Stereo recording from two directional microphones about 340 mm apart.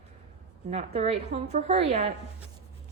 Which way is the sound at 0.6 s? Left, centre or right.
Centre.